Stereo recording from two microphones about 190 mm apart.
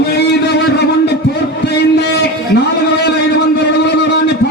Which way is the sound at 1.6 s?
60° left (ahead or behind).